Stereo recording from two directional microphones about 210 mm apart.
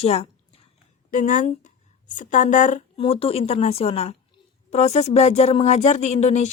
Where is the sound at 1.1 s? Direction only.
40° left (ahead or behind).